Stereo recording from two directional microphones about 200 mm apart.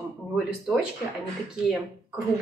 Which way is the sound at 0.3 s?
5° right (ahead or behind).